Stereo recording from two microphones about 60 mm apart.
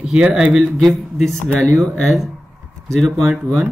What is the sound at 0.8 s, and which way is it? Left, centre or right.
Speech, centre.